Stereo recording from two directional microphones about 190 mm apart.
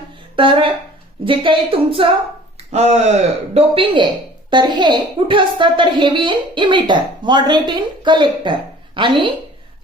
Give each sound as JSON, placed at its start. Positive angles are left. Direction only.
{"t": 0.3, "sound": "a woman's voice", "side_deg": -25}